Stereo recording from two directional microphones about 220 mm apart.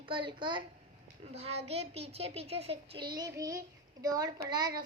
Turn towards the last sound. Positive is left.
turn(degrees=-20)  # may be behind; listen again after turning